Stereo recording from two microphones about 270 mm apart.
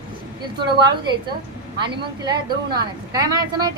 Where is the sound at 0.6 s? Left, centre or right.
Centre.